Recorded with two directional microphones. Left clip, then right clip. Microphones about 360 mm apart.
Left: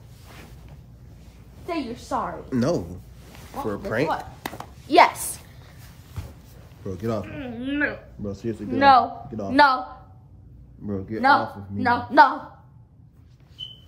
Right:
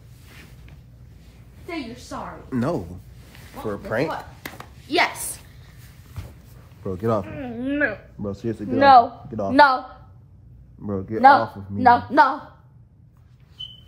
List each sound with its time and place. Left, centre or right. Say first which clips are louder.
2.1 s a woman's voice: left 8 dB; centre
2.5 s a woman's voice: even; centre
4.6 s a sound: left 5 dB; left
6.8 s speech: right 5 dB; centre
10.9 s a woman's voice: right 5 dB; centre